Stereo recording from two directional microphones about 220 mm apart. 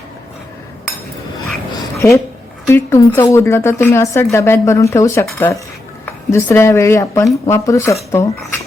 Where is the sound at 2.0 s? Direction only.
10° left (ahead or behind).